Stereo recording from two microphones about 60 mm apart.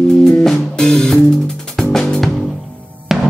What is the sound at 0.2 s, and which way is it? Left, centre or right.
Music, centre.